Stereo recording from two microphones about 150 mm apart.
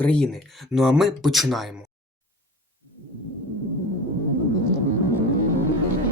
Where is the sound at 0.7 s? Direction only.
Centre (ahead or behind).